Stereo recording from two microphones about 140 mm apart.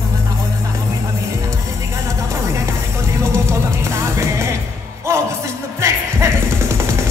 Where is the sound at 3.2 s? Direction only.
20° right (ahead or behind).